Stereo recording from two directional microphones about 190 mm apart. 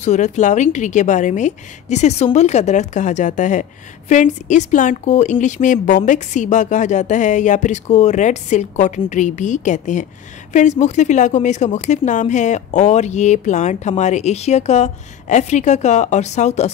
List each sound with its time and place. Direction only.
0.0 s speech: 40° left (ahead or behind)